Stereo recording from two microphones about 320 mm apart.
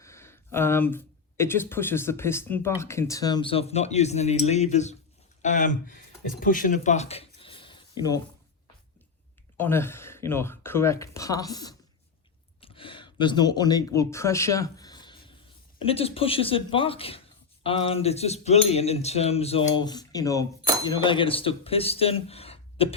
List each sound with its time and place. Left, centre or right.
0.0 s speech: centre
9.6 s speech: centre